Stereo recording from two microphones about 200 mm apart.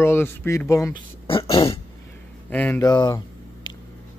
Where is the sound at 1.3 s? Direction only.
25° left (ahead or behind).